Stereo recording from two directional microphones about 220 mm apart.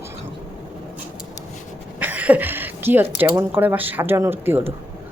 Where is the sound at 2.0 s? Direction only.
10° right (ahead or behind).